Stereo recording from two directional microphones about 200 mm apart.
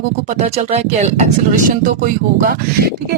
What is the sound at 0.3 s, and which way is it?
Speech, 35° right (ahead or behind).